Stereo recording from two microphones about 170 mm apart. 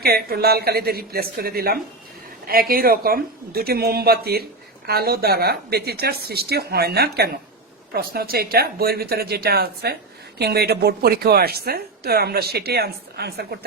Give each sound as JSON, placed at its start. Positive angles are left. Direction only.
{"t": 0.0, "sound": "a woman's voice", "side_deg": -65}